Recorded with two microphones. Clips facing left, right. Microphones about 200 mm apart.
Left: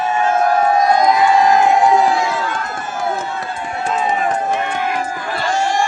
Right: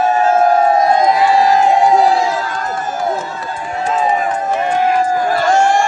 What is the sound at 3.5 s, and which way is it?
Run, 40° right (ahead or behind).